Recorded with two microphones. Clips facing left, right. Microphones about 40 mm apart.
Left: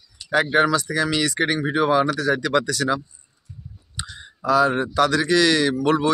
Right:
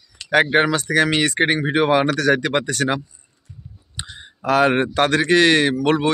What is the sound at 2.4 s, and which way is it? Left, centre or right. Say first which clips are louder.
Speech: right 1 dB; right.